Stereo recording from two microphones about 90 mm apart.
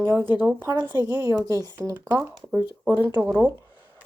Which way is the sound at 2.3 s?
5° left (ahead or behind).